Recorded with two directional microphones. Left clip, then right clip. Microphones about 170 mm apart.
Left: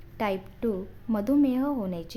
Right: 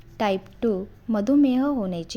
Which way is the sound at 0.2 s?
20° right (ahead or behind).